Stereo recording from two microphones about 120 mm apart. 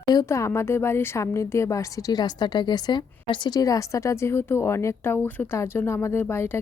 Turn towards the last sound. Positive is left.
turn(degrees=20)  # may be behind; listen again after turning